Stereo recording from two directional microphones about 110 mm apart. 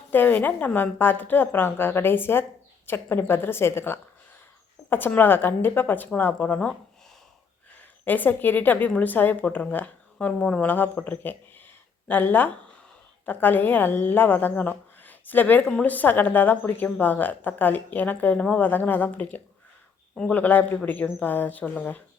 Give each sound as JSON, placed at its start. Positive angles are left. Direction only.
{"t": 0.1, "sound": "a woman's voice", "side_deg": 15}
{"t": 8.0, "sound": "a woman's voice", "side_deg": 15}